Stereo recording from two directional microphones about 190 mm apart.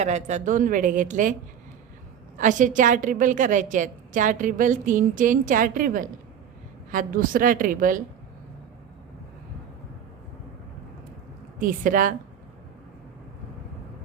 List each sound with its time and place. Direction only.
0.0 s a woman's voice: 35° right (ahead or behind)
2.4 s a woman's voice: 40° right (ahead or behind)
11.6 s a woman's voice: 45° right (ahead or behind)